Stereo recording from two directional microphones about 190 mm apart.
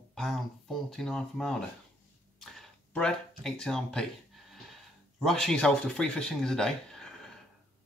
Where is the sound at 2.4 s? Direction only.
5° left (ahead or behind).